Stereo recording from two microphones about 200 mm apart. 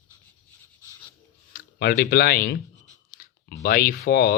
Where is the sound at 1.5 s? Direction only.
50° left (ahead or behind).